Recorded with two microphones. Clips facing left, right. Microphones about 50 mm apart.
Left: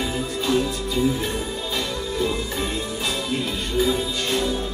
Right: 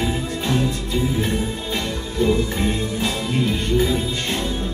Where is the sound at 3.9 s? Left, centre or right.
Right.